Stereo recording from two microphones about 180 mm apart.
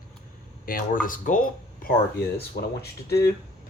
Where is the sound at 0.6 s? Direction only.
50° left (ahead or behind).